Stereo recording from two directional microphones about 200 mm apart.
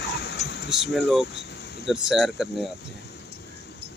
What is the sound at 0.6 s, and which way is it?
Speech, centre (ahead or behind).